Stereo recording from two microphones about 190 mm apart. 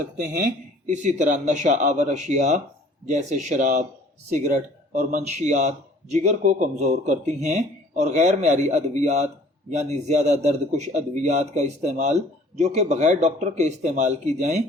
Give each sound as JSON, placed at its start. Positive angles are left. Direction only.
{"t": 0.2, "sound": "a man's voice", "side_deg": -45}